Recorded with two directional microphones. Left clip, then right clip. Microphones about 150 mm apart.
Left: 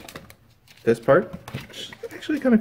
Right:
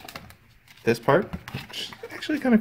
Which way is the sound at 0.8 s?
30° right (ahead or behind).